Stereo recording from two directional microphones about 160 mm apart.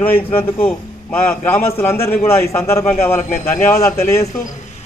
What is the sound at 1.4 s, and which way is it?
A man's voice, 15° left (ahead or behind).